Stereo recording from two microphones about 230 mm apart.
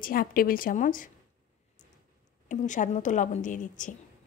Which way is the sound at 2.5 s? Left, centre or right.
Left.